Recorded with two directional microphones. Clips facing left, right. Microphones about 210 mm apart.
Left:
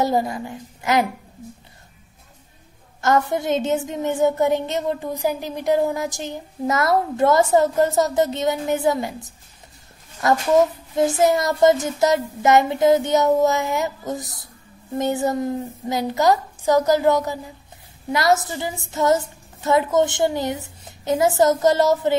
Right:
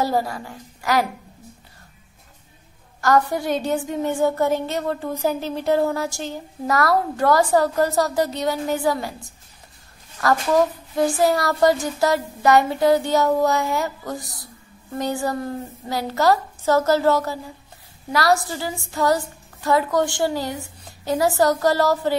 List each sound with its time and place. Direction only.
0.0 s a woman's voice: 20° left (ahead or behind)
3.0 s a woman's voice: 25° left (ahead or behind)